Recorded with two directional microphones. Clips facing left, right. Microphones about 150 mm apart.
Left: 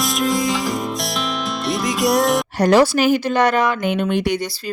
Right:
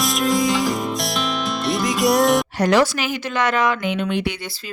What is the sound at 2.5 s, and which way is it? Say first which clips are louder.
Speech: left 3 dB; 35° left (ahead or behind).